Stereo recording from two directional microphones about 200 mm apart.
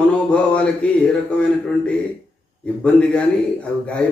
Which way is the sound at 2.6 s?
5° left (ahead or behind).